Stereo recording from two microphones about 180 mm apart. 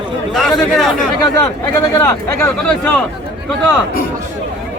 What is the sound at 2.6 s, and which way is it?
Speech, 5° left (ahead or behind).